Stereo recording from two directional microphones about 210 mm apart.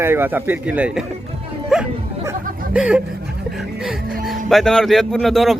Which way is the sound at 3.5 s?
Centre (ahead or behind).